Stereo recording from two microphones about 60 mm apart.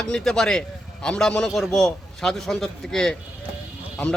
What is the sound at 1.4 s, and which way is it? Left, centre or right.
Speech, centre.